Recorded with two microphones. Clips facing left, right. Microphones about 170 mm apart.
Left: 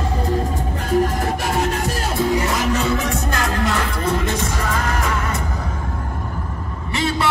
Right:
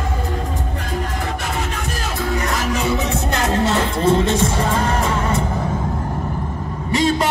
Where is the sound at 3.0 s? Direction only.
25° right (ahead or behind).